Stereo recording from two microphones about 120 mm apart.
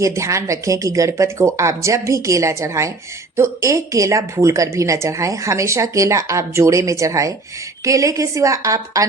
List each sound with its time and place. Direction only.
0.0 s a woman's voice: 25° right (ahead or behind)